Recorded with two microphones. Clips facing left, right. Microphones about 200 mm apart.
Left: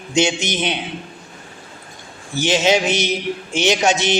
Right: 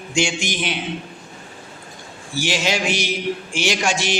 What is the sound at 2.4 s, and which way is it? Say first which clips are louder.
Speech: left 6 dB; 20° left (ahead or behind).